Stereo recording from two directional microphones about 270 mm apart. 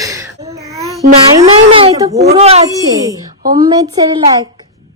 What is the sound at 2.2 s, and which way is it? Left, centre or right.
Speech, right.